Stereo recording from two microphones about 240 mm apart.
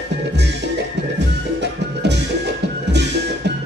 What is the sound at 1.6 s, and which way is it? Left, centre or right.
Music, right.